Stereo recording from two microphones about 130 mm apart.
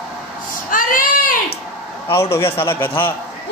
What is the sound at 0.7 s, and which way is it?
Child singing, 90° left.